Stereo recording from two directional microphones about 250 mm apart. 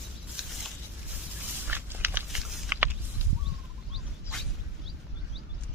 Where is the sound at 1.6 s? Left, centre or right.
Centre.